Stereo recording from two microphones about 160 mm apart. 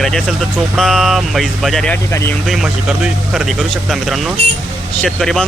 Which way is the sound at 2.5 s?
5° right (ahead or behind).